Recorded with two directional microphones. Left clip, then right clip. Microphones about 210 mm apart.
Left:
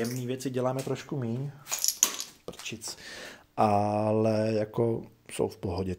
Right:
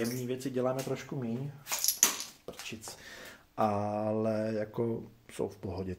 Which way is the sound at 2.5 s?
50° left (ahead or behind).